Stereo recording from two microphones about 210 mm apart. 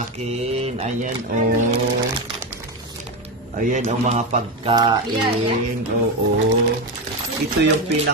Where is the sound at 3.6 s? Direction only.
35° right (ahead or behind).